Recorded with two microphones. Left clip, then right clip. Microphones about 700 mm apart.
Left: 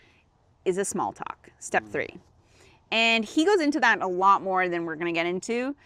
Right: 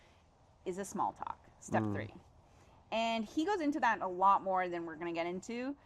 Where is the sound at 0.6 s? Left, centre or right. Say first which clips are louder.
Left 10 dB; left.